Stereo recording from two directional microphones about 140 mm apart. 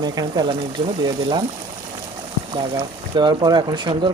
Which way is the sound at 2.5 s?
35° right (ahead or behind).